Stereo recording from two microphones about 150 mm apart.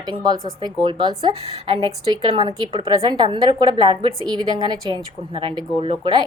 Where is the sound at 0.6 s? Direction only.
30° right (ahead or behind).